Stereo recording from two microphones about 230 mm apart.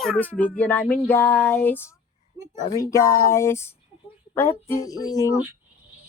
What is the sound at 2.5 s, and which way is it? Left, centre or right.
Speech, left.